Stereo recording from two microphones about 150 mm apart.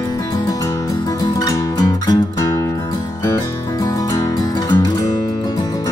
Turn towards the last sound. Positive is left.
turn(degrees=25)  # may be behind; listen again after turning